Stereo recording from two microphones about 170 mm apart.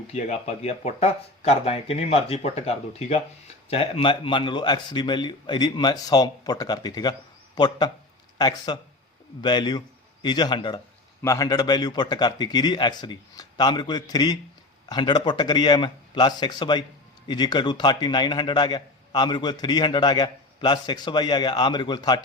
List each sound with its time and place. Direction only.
0.1 s speech: 40° left (ahead or behind)